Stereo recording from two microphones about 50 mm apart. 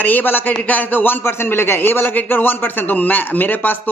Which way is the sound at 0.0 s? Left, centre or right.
Left.